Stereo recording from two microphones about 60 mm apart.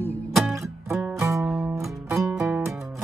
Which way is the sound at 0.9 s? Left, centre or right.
Right.